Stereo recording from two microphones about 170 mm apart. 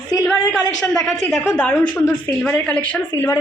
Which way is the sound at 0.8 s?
Centre (ahead or behind).